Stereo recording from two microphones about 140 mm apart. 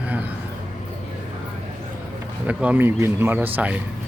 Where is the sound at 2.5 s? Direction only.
10° right (ahead or behind).